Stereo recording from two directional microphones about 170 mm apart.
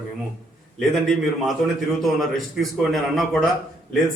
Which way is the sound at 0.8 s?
Centre (ahead or behind).